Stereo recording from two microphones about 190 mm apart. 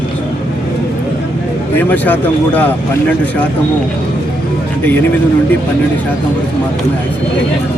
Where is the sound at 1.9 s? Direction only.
10° left (ahead or behind).